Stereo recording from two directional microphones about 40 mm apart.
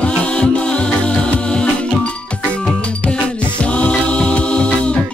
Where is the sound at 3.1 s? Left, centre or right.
Left.